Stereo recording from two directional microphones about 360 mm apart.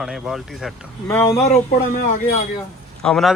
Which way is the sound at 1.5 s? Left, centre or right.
Left.